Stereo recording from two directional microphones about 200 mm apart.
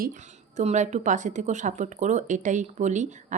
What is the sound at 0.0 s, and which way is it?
A woman's voice, 40° right (ahead or behind).